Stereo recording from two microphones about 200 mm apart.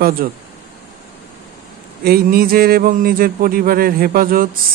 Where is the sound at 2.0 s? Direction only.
50° right (ahead or behind).